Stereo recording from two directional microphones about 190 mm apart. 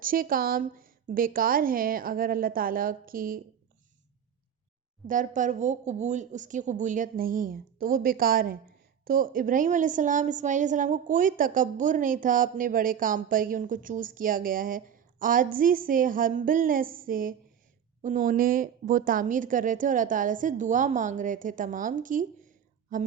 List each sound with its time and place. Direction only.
0.0 s speech: 50° right (ahead or behind)
5.0 s speech: 45° right (ahead or behind)